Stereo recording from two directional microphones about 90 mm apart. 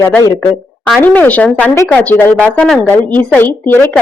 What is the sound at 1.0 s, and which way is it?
Speech, 20° left (ahead or behind).